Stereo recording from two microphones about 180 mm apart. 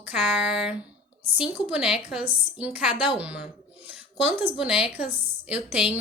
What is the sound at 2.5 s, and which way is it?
A woman's voice, 5° right (ahead or behind).